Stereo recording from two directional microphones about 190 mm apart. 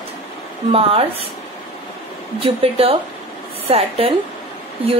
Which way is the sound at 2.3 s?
30° right (ahead or behind).